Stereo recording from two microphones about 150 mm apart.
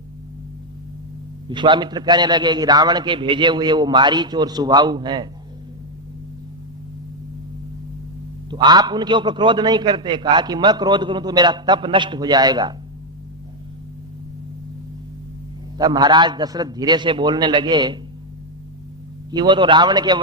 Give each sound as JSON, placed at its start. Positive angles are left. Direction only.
{"t": 1.5, "sound": "a man's voice", "side_deg": -30}
{"t": 8.4, "sound": "a man's voice", "side_deg": -30}
{"t": 15.8, "sound": "a man's voice", "side_deg": -30}
{"t": 19.3, "sound": "a man's voice", "side_deg": -30}